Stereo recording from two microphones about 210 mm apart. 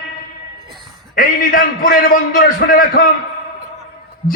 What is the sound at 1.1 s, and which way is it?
A man's voice, 40° left (ahead or behind).